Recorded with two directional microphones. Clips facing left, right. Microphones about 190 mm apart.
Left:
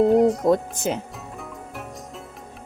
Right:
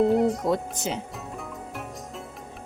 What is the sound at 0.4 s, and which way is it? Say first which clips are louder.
Speech: left 6 dB; 50° left (ahead or behind).